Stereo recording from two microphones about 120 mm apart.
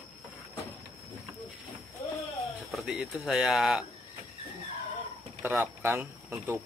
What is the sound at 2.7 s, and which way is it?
Speech, 5° right (ahead or behind).